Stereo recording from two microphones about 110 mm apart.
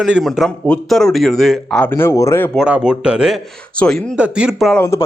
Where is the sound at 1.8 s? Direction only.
20° left (ahead or behind).